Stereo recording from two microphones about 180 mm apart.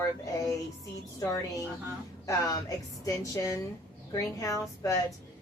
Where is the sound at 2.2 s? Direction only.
15° left (ahead or behind).